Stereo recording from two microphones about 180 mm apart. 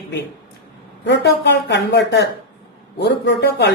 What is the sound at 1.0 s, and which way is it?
Speech, 75° left (ahead or behind).